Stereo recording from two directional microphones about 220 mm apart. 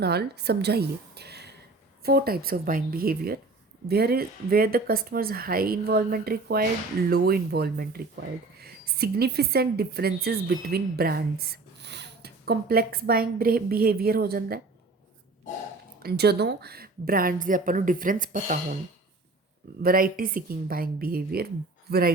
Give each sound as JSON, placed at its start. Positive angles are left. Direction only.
{"t": 0.0, "sound": "a woman's voice", "side_deg": -45}
{"t": 16.0, "sound": "a woman's voice", "side_deg": -45}
{"t": 19.8, "sound": "a woman's voice", "side_deg": -40}